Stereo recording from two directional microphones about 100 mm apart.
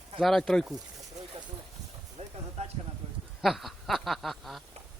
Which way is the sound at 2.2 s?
90° right.